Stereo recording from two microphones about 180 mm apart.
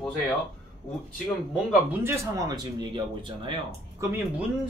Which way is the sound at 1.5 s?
10° right (ahead or behind).